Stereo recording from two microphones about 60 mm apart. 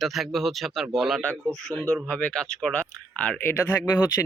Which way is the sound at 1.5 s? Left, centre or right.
Centre.